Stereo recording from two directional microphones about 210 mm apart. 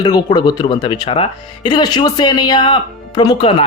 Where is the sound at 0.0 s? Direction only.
20° left (ahead or behind).